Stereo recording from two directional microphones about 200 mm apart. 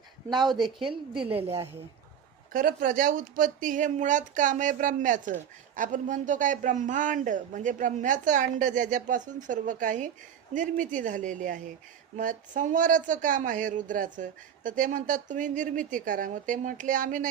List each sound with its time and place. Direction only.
0.4 s a woman's voice: centre (ahead or behind)
2.5 s speech: 45° right (ahead or behind)